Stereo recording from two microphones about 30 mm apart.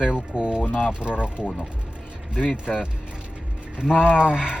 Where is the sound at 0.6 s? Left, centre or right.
Left.